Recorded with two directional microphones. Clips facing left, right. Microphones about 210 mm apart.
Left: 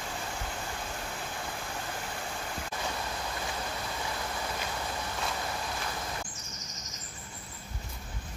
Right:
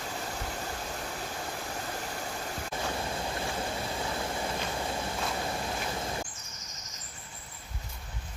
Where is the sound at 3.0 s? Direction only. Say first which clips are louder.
Right 3 dB; 25° right (ahead or behind).